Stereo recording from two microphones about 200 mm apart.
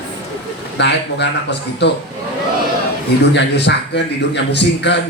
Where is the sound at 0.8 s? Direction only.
60° left (ahead or behind).